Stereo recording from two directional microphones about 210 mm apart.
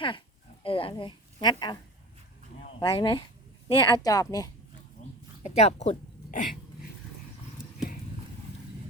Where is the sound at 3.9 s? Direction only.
15° left (ahead or behind).